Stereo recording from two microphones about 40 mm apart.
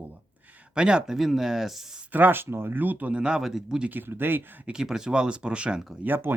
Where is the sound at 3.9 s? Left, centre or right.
Right.